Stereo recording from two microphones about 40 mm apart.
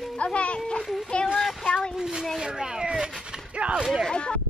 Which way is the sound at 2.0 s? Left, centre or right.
Centre.